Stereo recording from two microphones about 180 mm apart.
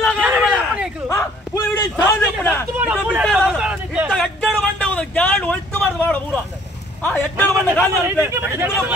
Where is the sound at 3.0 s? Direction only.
5° right (ahead or behind).